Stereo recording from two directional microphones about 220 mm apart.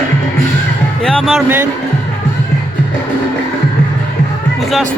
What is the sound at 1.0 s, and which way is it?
Music, centre (ahead or behind).